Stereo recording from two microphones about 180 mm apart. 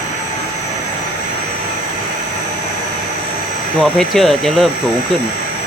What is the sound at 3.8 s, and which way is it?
Speech, 5° left (ahead or behind).